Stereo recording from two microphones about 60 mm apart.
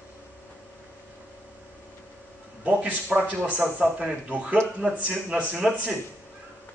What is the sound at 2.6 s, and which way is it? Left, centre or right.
A man's voice, right.